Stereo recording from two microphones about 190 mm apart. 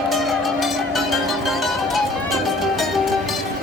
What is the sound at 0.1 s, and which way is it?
Music, centre (ahead or behind).